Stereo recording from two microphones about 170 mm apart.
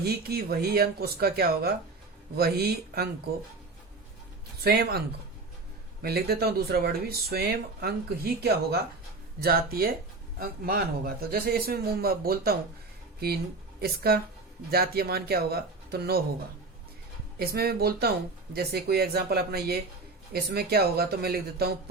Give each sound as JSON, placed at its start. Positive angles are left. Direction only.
{"t": 0.0, "sound": "speech", "side_deg": -65}
{"t": 4.6, "sound": "speech", "side_deg": -65}
{"t": 17.4, "sound": "speech", "side_deg": -65}